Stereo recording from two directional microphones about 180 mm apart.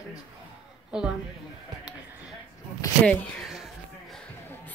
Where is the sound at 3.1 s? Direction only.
Centre (ahead or behind).